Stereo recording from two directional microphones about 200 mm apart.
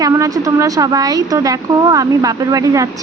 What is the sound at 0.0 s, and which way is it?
A woman's voice, 15° right (ahead or behind).